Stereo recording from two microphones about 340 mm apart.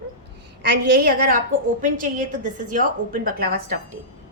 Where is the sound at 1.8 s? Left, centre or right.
Right.